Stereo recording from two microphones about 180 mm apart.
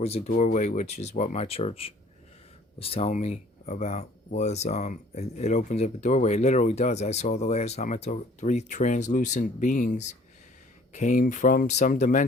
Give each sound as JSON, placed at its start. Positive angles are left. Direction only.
{"t": 0.3, "sound": "speech", "side_deg": 40}